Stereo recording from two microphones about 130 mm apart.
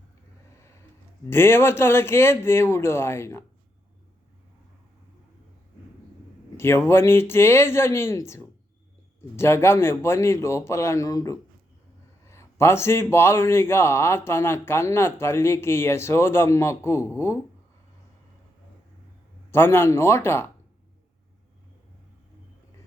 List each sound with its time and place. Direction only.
1.3 s speech: 20° left (ahead or behind)
6.6 s speech: 20° left (ahead or behind)
19.5 s speech: 15° left (ahead or behind)